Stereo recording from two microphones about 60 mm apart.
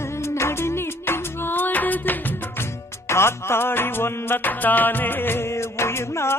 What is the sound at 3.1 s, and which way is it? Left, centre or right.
Music, left.